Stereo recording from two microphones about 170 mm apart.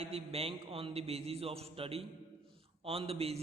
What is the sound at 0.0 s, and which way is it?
A man's voice, 35° right (ahead or behind).